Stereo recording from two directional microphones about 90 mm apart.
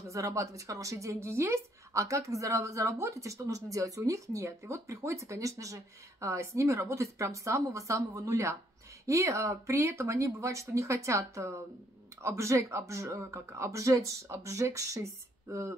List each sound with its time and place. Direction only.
0.1 s a woman's voice: 35° right (ahead or behind)